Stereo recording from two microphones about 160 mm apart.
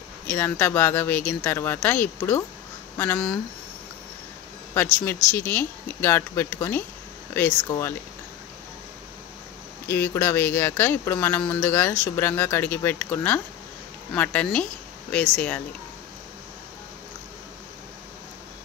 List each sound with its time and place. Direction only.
0.3 s speech: 15° left (ahead or behind)
4.9 s speech: 10° left (ahead or behind)
9.8 s speech: 15° left (ahead or behind)